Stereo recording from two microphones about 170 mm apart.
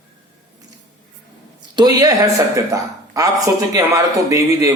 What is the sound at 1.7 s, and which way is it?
A woman's voice, 20° right (ahead or behind).